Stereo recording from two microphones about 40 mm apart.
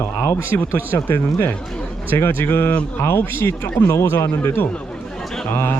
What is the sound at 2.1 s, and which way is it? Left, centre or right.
Speech, left.